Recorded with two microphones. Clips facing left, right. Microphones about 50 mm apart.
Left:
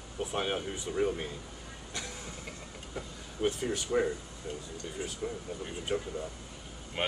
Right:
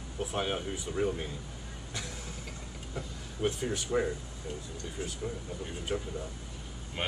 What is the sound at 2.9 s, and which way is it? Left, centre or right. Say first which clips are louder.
Speech: even; centre.